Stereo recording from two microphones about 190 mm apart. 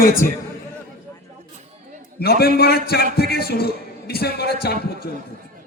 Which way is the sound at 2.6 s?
55° left (ahead or behind).